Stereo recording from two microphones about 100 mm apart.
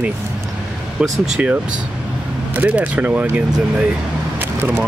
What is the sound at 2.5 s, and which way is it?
Speech, 15° right (ahead or behind).